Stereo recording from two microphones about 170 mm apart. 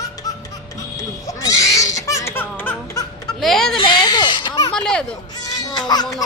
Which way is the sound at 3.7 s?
25° left (ahead or behind).